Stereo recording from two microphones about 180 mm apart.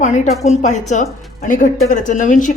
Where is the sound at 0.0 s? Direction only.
40° left (ahead or behind).